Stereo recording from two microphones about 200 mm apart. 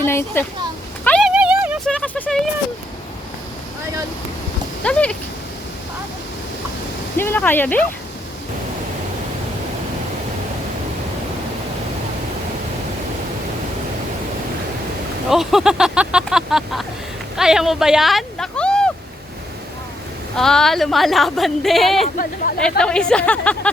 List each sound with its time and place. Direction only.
0.0 s speech: 10° left (ahead or behind)
1.0 s a sound: centre (ahead or behind)
1.9 s a sound: 5° left (ahead or behind)
4.8 s speech: 5° left (ahead or behind)
7.2 s speech: 10° left (ahead or behind)
15.3 s speech: centre (ahead or behind)
20.3 s speech: 5° left (ahead or behind)
22.0 s speech: 45° left (ahead or behind)
22.8 s speech: 5° left (ahead or behind)